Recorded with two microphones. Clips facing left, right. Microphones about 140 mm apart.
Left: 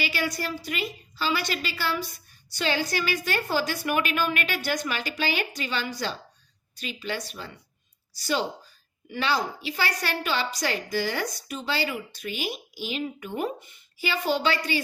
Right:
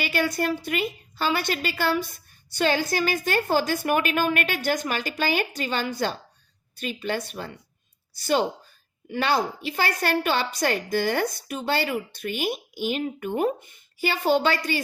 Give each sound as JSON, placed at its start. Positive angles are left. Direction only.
{"t": 0.1, "sound": "a woman's voice", "side_deg": -50}